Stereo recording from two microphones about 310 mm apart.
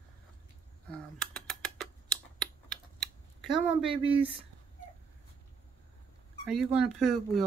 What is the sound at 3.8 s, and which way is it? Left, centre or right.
Speech, centre.